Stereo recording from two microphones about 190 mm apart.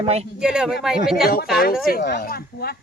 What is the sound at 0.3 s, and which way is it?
Speech, 5° right (ahead or behind).